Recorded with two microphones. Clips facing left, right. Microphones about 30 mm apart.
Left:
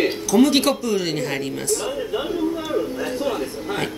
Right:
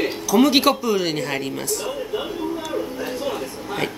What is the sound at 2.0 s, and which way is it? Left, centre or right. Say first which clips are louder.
Speech: left 1 dB; centre.